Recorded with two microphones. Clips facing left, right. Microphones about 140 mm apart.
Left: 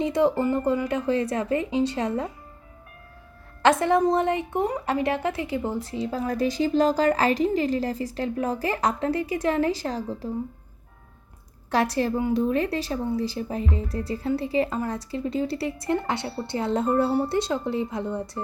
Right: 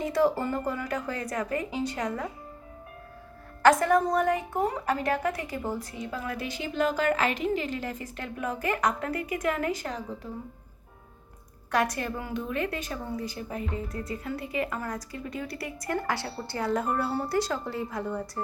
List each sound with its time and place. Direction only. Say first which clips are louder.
0.0 s a woman's voice: left 3 dB; 20° left (ahead or behind)
3.6 s a woman's voice: left 1 dB; 25° left (ahead or behind)
11.7 s a woman's voice: left 5 dB; 30° left (ahead or behind)